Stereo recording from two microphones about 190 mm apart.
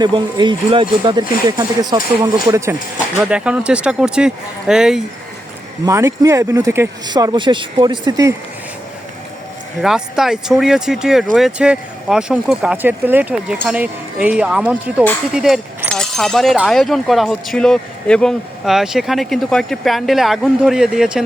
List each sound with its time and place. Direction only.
0.0 s speech: 25° right (ahead or behind)
3.2 s speech: 5° right (ahead or behind)
5.8 s speech: 15° right (ahead or behind)
9.8 s speech: centre (ahead or behind)